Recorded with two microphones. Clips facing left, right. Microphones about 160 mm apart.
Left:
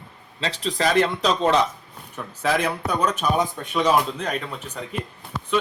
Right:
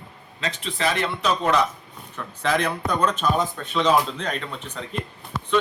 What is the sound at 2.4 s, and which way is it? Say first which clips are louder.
A man's voice: even; 5° left (ahead or behind).